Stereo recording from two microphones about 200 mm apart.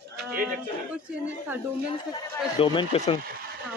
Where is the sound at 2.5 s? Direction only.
25° left (ahead or behind).